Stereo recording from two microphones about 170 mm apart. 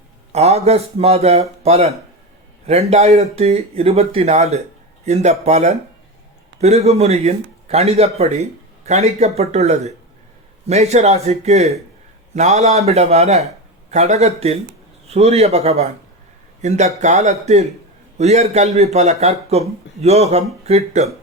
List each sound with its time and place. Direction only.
0.3 s speech: 40° right (ahead or behind)